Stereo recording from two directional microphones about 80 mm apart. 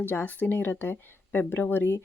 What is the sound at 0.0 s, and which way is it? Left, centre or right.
Speech, left.